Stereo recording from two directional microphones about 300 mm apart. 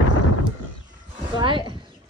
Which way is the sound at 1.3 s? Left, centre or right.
Centre.